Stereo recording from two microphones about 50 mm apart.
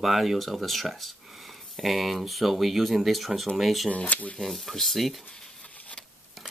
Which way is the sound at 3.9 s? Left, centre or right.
Left.